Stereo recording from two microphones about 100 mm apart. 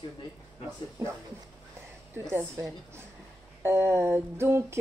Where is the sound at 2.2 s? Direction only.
30° right (ahead or behind).